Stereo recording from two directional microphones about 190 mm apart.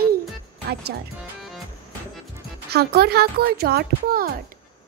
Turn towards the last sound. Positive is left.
turn(degrees=-50)  # may be behind; listen again after turning